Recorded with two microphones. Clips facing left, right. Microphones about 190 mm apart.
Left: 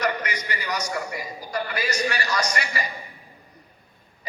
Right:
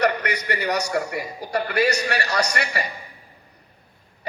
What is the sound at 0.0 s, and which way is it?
A man's voice, 65° right (ahead or behind).